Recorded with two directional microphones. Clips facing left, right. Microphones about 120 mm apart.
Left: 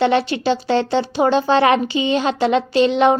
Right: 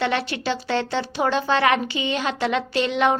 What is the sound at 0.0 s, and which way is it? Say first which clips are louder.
A woman's voice: left 7 dB; 25° left (ahead or behind).